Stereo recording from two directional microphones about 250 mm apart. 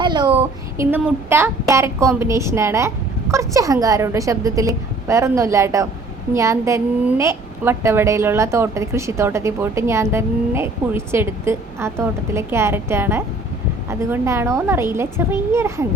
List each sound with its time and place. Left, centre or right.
0.0 s speech: centre
0.9 s a woman's voice: centre